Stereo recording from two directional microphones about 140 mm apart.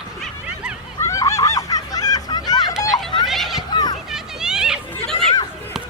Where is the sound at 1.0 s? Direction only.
20° left (ahead or behind).